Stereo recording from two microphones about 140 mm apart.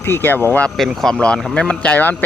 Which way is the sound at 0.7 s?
Centre (ahead or behind).